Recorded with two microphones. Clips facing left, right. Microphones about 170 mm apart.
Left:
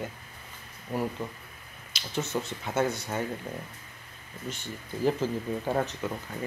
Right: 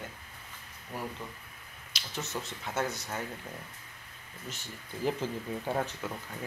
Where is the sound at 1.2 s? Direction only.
20° left (ahead or behind).